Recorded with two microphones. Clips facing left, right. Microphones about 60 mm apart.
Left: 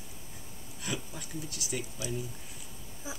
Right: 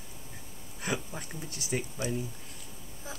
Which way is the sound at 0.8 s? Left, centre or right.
Right.